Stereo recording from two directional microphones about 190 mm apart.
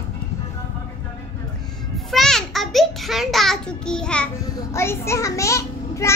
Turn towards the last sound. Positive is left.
turn(degrees=15)  # may be behind; listen again after turning